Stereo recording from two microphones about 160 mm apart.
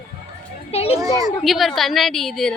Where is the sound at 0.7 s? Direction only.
40° left (ahead or behind).